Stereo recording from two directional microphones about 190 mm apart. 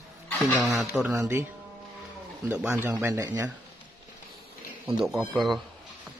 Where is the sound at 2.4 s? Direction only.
5° right (ahead or behind).